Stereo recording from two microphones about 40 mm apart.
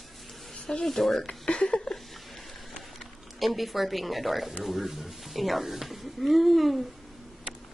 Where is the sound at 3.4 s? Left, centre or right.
Centre.